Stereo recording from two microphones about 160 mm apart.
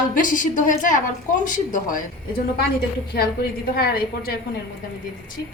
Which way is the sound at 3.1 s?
75° left (ahead or behind).